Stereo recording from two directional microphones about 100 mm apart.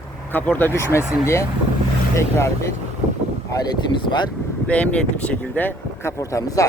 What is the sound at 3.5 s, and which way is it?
Speech, 40° left (ahead or behind).